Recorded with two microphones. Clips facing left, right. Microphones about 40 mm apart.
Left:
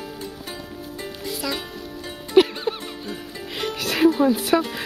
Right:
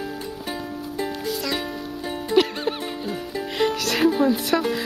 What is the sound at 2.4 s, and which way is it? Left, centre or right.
Music, centre.